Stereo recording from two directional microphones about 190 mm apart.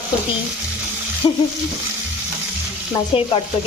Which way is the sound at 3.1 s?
30° left (ahead or behind).